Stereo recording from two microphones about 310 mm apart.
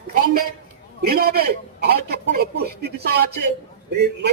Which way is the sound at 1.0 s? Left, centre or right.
Right.